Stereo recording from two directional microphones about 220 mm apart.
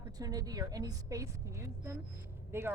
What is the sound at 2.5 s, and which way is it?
Speech, 10° right (ahead or behind).